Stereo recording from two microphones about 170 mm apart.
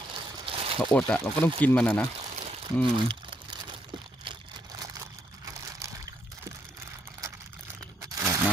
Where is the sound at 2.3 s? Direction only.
40° right (ahead or behind).